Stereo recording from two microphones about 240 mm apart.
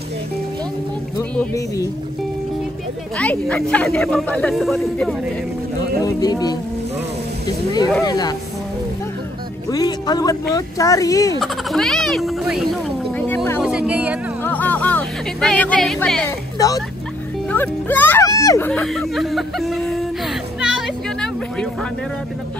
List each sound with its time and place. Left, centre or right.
1.1 s speech: centre
3.2 s speech: centre
6.0 s speech: centre
8.0 s speech: centre
9.7 s speech: centre
11.4 s speech: centre
13.1 s a sound: centre
13.6 s a sound: centre
14.4 s music: centre
16.5 s speech: centre
18.7 s speech: centre
20.6 s children playing: centre